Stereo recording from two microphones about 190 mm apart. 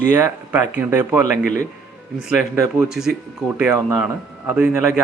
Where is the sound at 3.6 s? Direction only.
20° right (ahead or behind).